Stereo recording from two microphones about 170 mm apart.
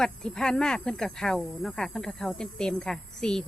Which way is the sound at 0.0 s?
5° left (ahead or behind).